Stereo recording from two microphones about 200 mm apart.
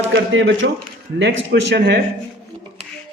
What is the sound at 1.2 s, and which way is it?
Speech, 55° right (ahead or behind).